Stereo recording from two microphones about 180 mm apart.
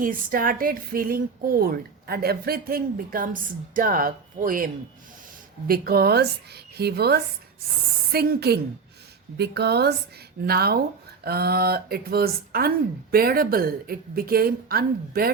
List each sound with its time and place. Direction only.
0.0 s speech: 50° right (ahead or behind)